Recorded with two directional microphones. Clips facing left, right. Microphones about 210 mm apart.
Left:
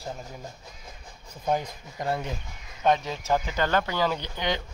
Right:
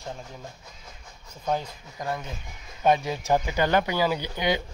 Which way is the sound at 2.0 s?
30° left (ahead or behind).